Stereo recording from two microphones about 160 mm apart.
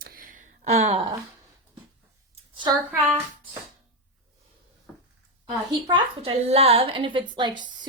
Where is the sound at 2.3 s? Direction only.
30° right (ahead or behind).